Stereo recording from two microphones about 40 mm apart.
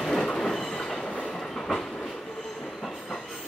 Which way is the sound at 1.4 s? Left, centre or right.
Centre.